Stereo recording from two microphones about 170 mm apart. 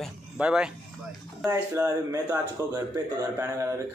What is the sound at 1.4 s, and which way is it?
Speech, 15° right (ahead or behind).